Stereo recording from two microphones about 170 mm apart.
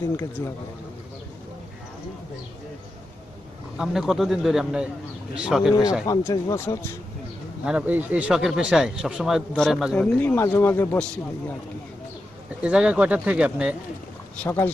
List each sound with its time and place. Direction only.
3.7 s speech: centre (ahead or behind)
5.7 s a man's voice: 25° left (ahead or behind)
7.6 s speech: 10° right (ahead or behind)
9.9 s a man's voice: 10° left (ahead or behind)
12.6 s speech: 5° right (ahead or behind)
14.4 s a man's voice: 10° left (ahead or behind)